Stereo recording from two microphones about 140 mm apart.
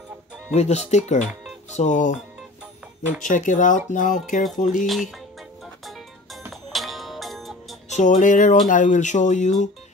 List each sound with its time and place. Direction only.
0.5 s speech: 50° left (ahead or behind)
3.2 s speech: 65° left (ahead or behind)
6.7 s music: centre (ahead or behind)
7.9 s speech: 65° left (ahead or behind)